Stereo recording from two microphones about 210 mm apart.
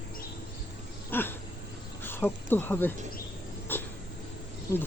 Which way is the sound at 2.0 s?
10° left (ahead or behind).